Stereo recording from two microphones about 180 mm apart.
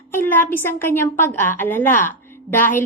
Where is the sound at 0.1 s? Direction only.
10° left (ahead or behind).